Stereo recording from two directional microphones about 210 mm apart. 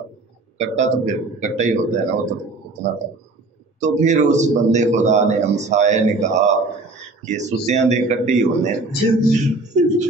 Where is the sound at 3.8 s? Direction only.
35° right (ahead or behind).